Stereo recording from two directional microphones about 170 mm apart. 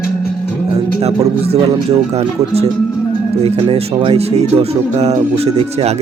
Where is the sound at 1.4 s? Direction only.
35° right (ahead or behind).